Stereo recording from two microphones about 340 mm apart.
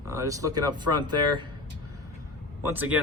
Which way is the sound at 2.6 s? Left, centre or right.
Centre.